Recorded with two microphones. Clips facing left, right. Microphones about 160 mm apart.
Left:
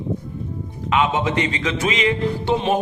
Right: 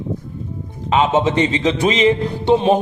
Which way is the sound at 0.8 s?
30° right (ahead or behind).